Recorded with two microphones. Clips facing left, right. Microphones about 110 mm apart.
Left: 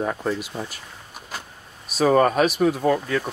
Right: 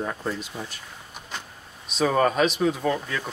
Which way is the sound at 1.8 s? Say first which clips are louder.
Left 4 dB; 5° left (ahead or behind).